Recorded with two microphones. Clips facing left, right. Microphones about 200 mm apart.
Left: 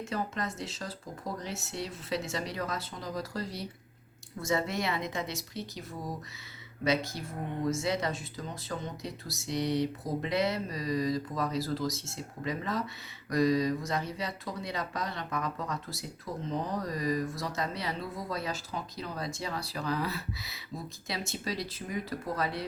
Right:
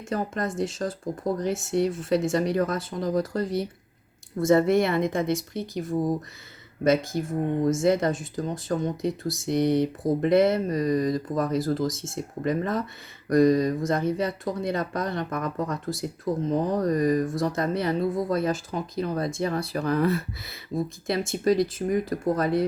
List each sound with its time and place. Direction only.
0.0 s speech: 50° right (ahead or behind)